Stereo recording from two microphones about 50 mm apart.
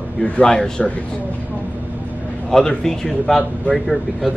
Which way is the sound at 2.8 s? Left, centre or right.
Centre.